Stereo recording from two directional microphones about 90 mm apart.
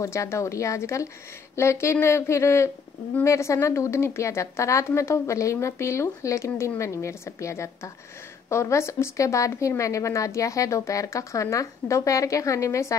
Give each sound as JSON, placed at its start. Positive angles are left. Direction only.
{"t": 0.0, "sound": "a woman's voice", "side_deg": 30}